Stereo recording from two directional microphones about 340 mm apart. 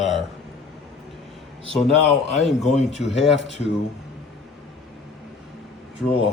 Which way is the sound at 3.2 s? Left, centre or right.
Left.